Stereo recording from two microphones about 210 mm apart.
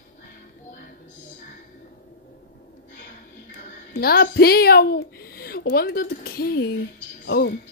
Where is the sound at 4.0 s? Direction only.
45° left (ahead or behind).